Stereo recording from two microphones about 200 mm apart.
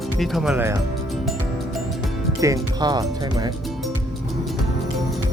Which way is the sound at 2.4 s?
20° right (ahead or behind).